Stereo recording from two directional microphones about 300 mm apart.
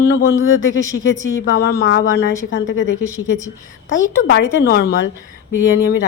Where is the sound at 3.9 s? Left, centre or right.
Left.